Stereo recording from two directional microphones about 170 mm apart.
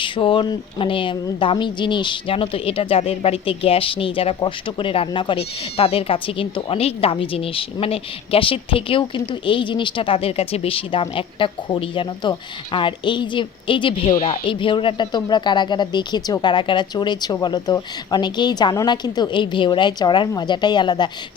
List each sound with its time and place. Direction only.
0.0 s speech: 30° left (ahead or behind)
14.1 s speech: 50° left (ahead or behind)
14.4 s speech: 30° left (ahead or behind)